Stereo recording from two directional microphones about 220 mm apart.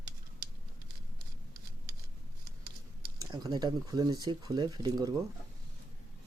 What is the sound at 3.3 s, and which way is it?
Speech, 20° right (ahead or behind).